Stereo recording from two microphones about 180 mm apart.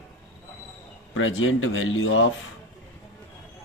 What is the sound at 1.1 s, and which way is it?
Speech, 90° left.